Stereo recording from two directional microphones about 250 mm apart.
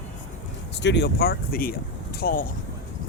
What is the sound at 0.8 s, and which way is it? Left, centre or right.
Speech, left.